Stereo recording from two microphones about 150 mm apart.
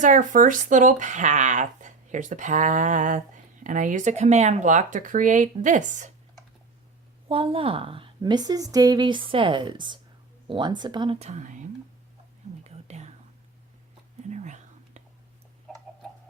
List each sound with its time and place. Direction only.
0.0 s speech: 60° right (ahead or behind)
7.3 s a woman's voice: 35° right (ahead or behind)
11.2 s speech: 50° right (ahead or behind)
12.6 s whispering: 45° right (ahead or behind)
14.2 s whispering: 50° right (ahead or behind)